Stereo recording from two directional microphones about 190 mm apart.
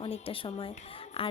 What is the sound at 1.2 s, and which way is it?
Music, 30° left (ahead or behind).